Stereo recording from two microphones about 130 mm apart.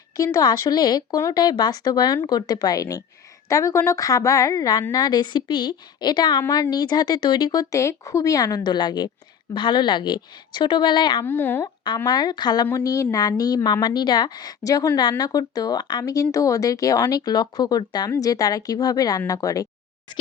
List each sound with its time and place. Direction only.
0.2 s a woman's voice: 30° left (ahead or behind)
11.2 s speech: 15° left (ahead or behind)
11.6 s a woman's voice: 35° left (ahead or behind)